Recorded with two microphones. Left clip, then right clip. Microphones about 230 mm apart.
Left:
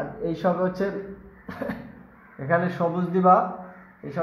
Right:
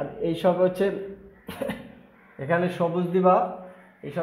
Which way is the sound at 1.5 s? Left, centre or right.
Right.